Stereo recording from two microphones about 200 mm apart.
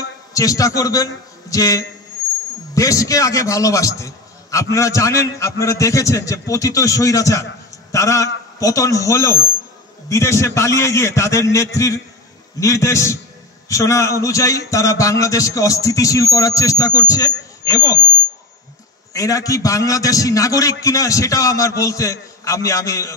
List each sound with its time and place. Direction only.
0.3 s a man's voice: 15° left (ahead or behind)
19.1 s a man's voice: 15° left (ahead or behind)